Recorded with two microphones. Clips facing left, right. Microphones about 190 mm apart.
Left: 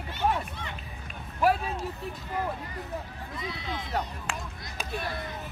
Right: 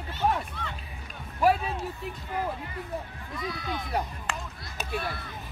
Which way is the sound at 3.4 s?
25° left (ahead or behind).